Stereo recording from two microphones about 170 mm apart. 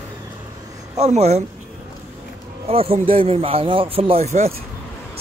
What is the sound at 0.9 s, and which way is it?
Speech, 40° right (ahead or behind).